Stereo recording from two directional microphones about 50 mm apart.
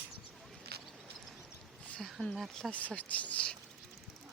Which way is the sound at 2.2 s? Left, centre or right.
Left.